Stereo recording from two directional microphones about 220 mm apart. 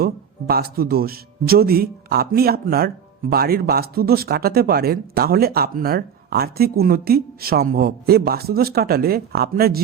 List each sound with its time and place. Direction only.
0.0 s speech: 45° right (ahead or behind)